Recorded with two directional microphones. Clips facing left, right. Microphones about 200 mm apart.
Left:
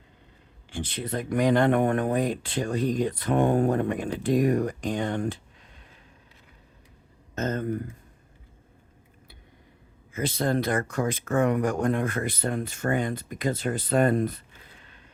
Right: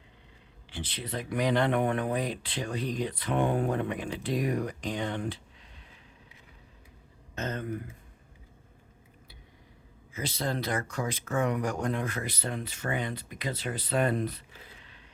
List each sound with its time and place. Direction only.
0.7 s speech: 45° left (ahead or behind)
7.3 s speech: 45° left (ahead or behind)
10.1 s speech: 50° left (ahead or behind)